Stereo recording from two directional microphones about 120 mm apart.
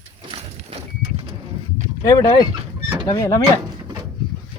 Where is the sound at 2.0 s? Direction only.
30° left (ahead or behind).